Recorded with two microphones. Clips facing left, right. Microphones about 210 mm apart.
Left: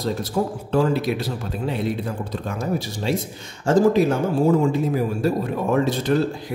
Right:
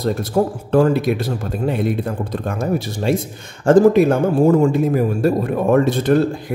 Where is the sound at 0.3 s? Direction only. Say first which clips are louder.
Right 6 dB; 50° right (ahead or behind).